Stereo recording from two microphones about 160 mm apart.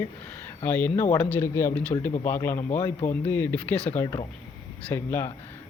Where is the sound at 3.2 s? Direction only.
10° left (ahead or behind).